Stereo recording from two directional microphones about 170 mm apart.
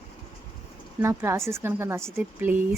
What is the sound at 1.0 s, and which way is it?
Speech, 15° right (ahead or behind).